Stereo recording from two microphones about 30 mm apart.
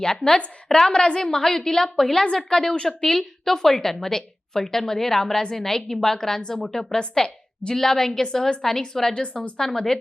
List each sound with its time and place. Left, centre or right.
0.0 s a woman's voice: left
3.1 s a woman's voice: centre
9.2 s speech: left
9.6 s a woman's voice: centre